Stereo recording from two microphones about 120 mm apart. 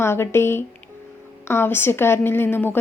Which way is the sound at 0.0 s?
20° left (ahead or behind).